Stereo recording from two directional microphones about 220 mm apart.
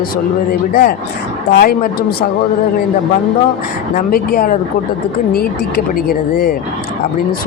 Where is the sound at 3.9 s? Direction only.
40° left (ahead or behind).